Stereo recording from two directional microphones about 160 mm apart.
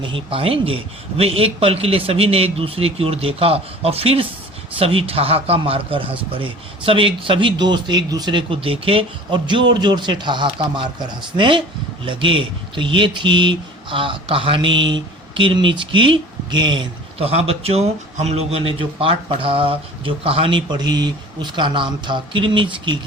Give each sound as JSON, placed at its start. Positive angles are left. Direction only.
{"t": 0.0, "sound": "speech", "side_deg": -35}